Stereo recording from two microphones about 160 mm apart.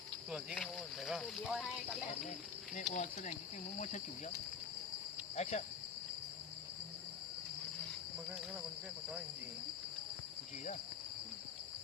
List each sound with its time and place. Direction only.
0.5 s speech: 5° left (ahead or behind)
2.7 s speech: 50° left (ahead or behind)
5.4 s speech: 45° left (ahead or behind)